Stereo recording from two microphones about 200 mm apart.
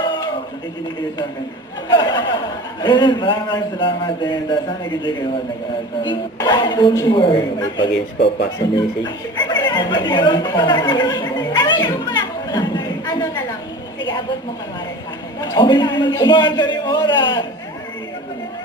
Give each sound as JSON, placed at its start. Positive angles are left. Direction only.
{"t": 0.0, "sound": "a sound", "side_deg": 20}
{"t": 1.9, "sound": "a man's voice", "side_deg": 20}
{"t": 8.5, "sound": "chuckle", "side_deg": 20}
{"t": 15.4, "sound": "a man's voice", "side_deg": 20}